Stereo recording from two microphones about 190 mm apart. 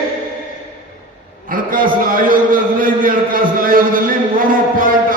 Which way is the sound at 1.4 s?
45° right (ahead or behind).